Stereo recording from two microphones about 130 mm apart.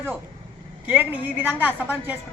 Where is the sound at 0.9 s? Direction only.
15° right (ahead or behind).